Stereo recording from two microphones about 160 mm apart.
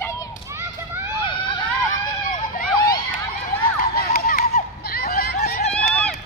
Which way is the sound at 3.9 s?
70° left (ahead or behind).